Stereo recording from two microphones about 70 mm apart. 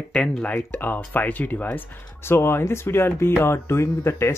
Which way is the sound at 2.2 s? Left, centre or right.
Left.